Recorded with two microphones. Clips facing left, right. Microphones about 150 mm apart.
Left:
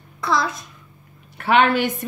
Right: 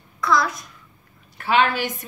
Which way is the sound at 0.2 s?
25° left (ahead or behind).